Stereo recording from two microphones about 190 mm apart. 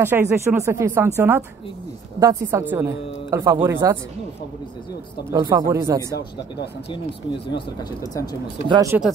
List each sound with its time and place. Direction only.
0.0 s a woman's voice: 10° right (ahead or behind)
5.3 s speech: 20° right (ahead or behind)
7.5 s speech: 20° left (ahead or behind)
8.9 s speech: 10° right (ahead or behind)